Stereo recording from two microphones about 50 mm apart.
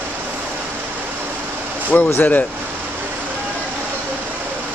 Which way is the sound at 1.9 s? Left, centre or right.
Left.